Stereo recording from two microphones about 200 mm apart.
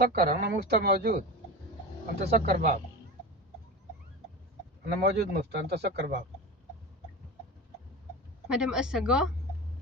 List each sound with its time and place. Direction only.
0.0 s speech: 50° right (ahead or behind)
2.3 s speech: 45° right (ahead or behind)
4.9 s speech: 50° right (ahead or behind)
8.5 s a woman's voice: 5° right (ahead or behind)